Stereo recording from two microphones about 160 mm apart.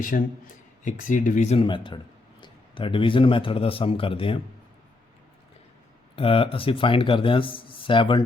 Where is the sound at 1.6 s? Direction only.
30° left (ahead or behind).